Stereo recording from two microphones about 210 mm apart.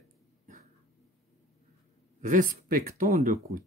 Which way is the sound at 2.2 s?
40° right (ahead or behind).